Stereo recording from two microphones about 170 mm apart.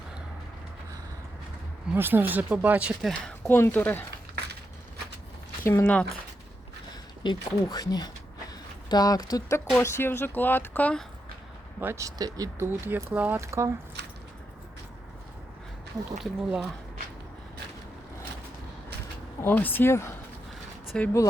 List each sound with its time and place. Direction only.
1.9 s speech: 10° right (ahead or behind)
3.1 s speech: 5° left (ahead or behind)
5.6 s speech: 10° left (ahead or behind)
7.2 s speech: 25° left (ahead or behind); by 11.0 s 10° left (ahead or behind)
11.8 s speech: 15° right (ahead or behind)
16.2 s speech: centre (ahead or behind)
19.4 s speech: 10° left (ahead or behind)